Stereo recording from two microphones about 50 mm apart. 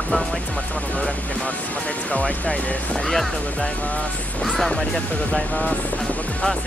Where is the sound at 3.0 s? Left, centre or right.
Centre.